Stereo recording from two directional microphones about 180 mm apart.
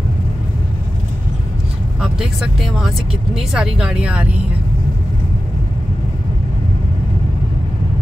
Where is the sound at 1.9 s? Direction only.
5° right (ahead or behind).